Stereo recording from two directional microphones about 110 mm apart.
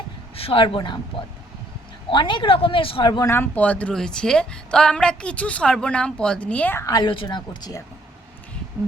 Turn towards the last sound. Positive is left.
turn(degrees=40)  # may be behind; listen again after turning